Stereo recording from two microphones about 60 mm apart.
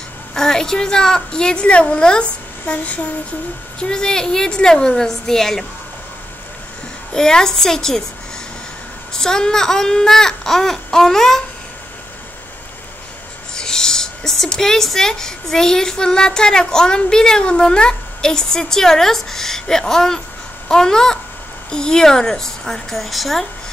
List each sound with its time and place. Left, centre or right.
0.3 s speech: centre
2.6 s a sound: left
3.8 s speech: centre
7.2 s speech: centre
9.1 s speech: centre
13.6 s speech: centre